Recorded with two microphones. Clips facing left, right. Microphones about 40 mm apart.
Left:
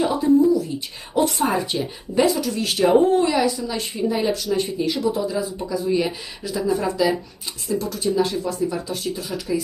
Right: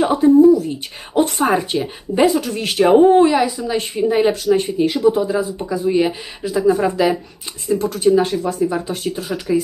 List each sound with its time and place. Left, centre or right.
0.0 s a sound: right
1.1 s speech: right
1.8 s a woman's voice: right
3.7 s speech: right